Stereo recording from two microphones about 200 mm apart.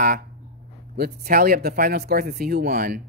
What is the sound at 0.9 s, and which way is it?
Speech, 50° right (ahead or behind).